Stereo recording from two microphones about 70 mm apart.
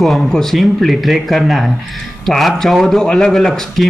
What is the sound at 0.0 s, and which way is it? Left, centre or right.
A man's voice, centre.